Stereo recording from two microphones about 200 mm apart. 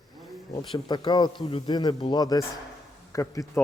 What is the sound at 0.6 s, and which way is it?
A man's voice, 20° left (ahead or behind).